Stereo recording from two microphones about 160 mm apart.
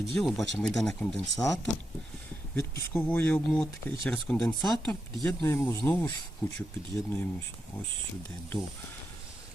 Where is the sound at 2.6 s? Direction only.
15° left (ahead or behind).